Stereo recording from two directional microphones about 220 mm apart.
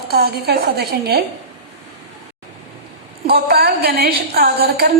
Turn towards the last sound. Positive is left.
turn(degrees=-45)  # may be behind; listen again after turning